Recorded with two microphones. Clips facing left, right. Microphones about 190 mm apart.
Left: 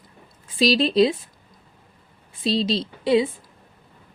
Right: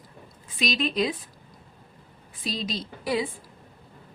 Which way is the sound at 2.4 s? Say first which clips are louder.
Left 9 dB; 30° left (ahead or behind).